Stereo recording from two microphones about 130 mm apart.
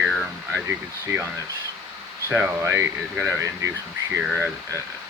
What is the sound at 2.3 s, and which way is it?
Speech, 15° right (ahead or behind).